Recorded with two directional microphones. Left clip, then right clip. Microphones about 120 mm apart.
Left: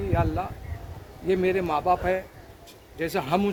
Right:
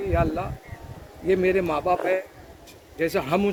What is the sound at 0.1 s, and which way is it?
Speech, 30° left (ahead or behind).